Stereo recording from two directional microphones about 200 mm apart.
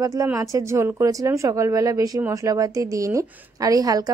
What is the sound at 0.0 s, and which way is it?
Speech, 15° right (ahead or behind).